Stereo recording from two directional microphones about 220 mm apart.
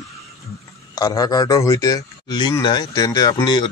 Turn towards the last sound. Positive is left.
turn(degrees=20)  # may be behind; listen again after turning